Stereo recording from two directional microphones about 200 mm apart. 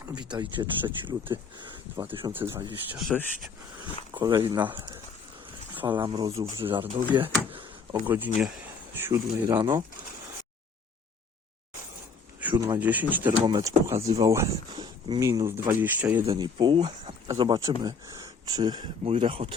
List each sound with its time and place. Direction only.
0.0 s speech: 20° right (ahead or behind)
2.3 s speech: 10° right (ahead or behind)
4.1 s speech: 20° right (ahead or behind)
4.5 s speech: 10° right (ahead or behind)
5.9 s speech: 20° right (ahead or behind)
8.0 s speech: 10° right (ahead or behind)
12.5 s speech: 20° right (ahead or behind)
12.8 s speech: 10° right (ahead or behind)
16.2 s speech: 25° right (ahead or behind)